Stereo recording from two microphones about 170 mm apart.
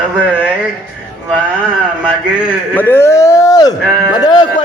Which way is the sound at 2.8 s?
15° left (ahead or behind).